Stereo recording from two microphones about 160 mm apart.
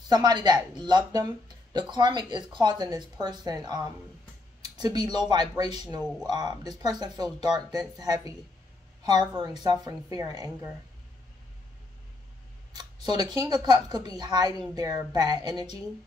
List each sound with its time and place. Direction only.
0.1 s speech: 25° right (ahead or behind)
12.7 s speech: 25° right (ahead or behind)